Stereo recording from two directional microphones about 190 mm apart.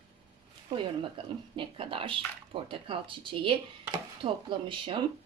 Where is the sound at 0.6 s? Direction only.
25° right (ahead or behind).